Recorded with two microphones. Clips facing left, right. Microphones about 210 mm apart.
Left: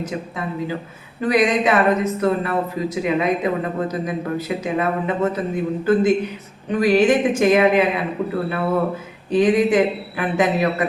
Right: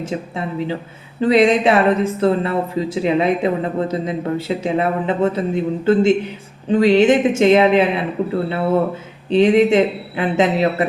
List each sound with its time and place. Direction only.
0.0 s speech: 30° right (ahead or behind)